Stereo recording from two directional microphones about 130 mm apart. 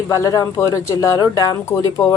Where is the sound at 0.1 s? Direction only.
25° left (ahead or behind).